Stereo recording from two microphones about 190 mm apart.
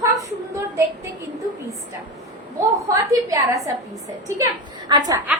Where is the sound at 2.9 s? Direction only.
15° right (ahead or behind).